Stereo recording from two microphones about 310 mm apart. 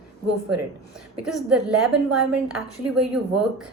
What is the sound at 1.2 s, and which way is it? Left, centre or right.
A woman's voice, centre.